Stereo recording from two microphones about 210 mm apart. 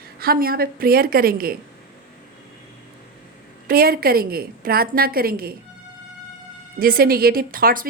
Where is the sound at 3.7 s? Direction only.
45° right (ahead or behind).